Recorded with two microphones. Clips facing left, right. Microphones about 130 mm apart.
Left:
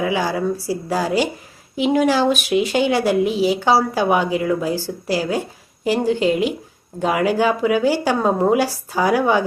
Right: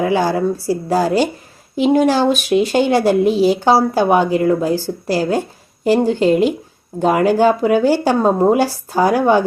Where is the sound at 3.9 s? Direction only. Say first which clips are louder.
Right 4 dB; 40° right (ahead or behind).